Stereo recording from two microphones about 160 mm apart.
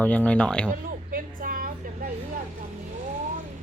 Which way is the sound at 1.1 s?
60° right (ahead or behind).